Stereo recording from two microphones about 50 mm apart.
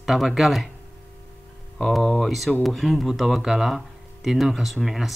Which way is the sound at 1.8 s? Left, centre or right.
Centre.